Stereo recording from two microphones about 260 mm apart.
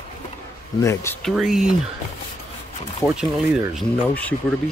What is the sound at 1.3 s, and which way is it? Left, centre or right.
Speech, centre.